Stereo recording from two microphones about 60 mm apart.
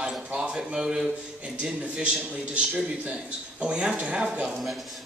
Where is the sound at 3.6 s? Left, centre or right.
Centre.